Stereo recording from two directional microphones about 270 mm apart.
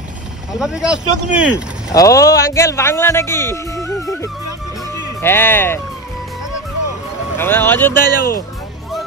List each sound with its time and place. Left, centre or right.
0.5 s speech: centre
1.9 s speech: centre
7.3 s speech: centre
8.2 s speech: left